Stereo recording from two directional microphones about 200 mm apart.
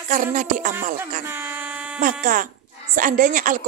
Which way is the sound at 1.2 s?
10° right (ahead or behind).